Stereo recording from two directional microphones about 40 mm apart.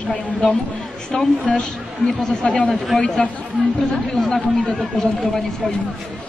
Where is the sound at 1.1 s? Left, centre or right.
Centre.